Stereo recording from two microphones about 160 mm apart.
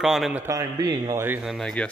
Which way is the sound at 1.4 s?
Centre (ahead or behind).